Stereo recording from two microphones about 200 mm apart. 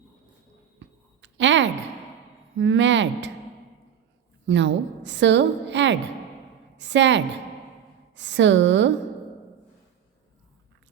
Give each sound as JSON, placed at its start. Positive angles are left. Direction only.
{"t": 1.2, "sound": "a sound", "side_deg": -65}
{"t": 2.6, "sound": "speech", "side_deg": -65}
{"t": 4.4, "sound": "a woman's voice", "side_deg": -65}